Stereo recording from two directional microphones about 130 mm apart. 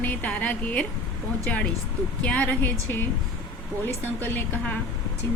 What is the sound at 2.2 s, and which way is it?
Speech, 10° left (ahead or behind).